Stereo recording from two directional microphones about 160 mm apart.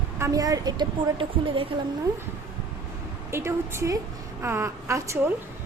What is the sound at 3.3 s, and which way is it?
A woman's voice, 15° right (ahead or behind).